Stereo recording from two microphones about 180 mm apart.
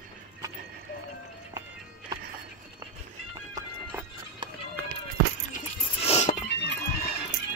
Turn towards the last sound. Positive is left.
turn(degrees=70)  # may be behind; listen again after turning